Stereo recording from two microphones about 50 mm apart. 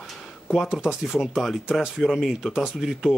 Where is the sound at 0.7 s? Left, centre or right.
Centre.